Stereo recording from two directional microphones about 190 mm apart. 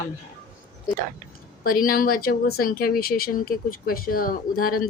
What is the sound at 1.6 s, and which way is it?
Speech, 50° left (ahead or behind).